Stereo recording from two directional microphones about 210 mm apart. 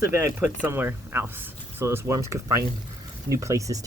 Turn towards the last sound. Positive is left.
turn(degrees=-15)  # may be behind; listen again after turning